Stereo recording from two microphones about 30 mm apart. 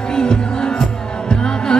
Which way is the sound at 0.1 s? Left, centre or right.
Left.